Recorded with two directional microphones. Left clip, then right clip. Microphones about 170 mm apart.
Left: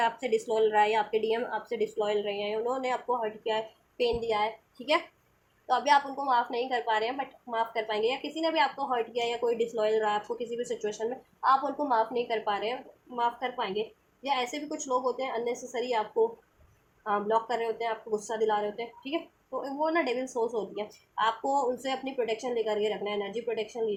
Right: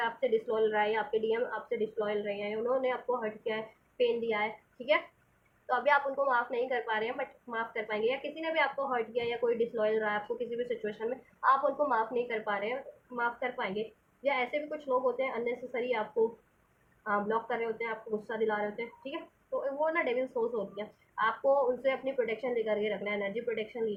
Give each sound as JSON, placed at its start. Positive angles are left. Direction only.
{"t": 0.0, "sound": "a woman's voice", "side_deg": 40}
{"t": 5.6, "sound": "a woman's voice", "side_deg": 35}